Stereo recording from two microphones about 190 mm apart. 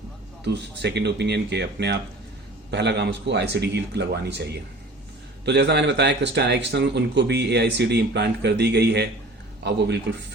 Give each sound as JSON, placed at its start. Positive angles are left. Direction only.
{"t": 0.4, "sound": "speech", "side_deg": -65}
{"t": 5.5, "sound": "speech", "side_deg": -65}